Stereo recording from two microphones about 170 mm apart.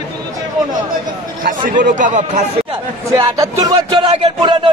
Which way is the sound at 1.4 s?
50° right (ahead or behind).